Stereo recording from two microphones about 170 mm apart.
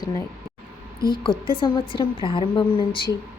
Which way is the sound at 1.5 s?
30° left (ahead or behind).